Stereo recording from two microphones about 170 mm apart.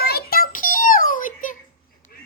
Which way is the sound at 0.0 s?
65° left (ahead or behind).